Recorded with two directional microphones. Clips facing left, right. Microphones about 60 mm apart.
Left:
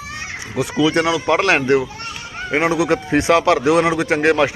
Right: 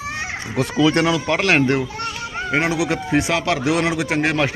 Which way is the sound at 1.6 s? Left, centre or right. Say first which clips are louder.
Left 3 dB; left.